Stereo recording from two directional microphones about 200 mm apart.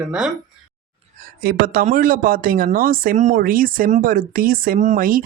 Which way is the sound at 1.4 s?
45° right (ahead or behind).